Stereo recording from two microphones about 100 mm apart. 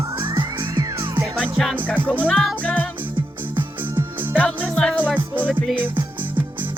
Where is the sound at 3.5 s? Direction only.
20° right (ahead or behind).